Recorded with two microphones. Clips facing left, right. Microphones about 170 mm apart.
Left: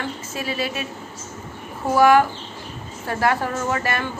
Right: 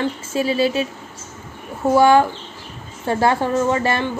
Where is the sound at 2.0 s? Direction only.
25° right (ahead or behind).